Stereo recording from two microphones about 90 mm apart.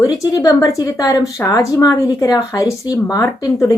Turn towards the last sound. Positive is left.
turn(degrees=40)  # may be behind; listen again after turning